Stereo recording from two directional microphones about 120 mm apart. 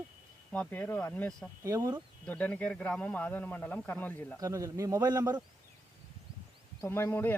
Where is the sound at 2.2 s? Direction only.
10° left (ahead or behind).